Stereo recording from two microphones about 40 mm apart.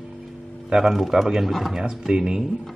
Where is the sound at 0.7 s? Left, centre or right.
Centre.